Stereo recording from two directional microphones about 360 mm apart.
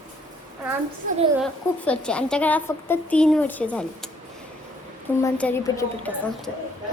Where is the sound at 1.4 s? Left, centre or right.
Centre.